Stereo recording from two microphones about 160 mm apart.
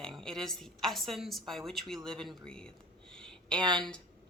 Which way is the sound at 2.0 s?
Centre (ahead or behind).